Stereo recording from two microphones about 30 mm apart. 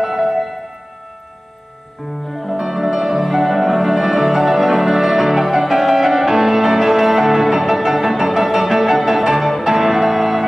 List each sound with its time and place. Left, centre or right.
0.0 s music: centre
2.2 s music: centre
2.5 s music: centre
9.4 s music: centre
9.7 s music: centre